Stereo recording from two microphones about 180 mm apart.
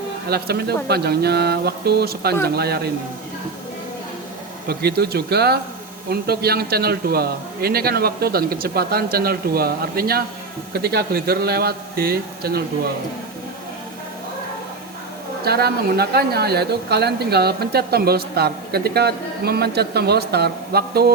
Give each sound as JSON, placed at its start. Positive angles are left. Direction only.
{"t": 0.3, "sound": "speech", "side_deg": -60}
{"t": 4.7, "sound": "speech", "side_deg": -60}
{"t": 15.4, "sound": "speech", "side_deg": -60}